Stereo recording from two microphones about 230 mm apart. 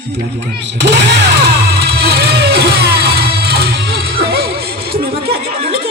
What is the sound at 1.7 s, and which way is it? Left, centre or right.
Music, right.